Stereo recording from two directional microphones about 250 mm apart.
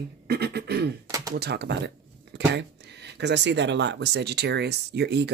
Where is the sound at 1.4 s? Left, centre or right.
Right.